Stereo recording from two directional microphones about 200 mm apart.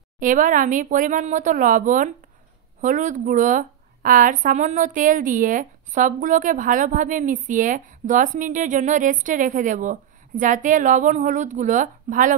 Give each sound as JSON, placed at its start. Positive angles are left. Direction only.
{"t": 0.2, "sound": "speech", "side_deg": -40}